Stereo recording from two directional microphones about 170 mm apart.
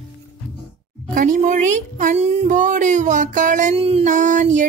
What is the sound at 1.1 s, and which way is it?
Speech, 55° right (ahead or behind).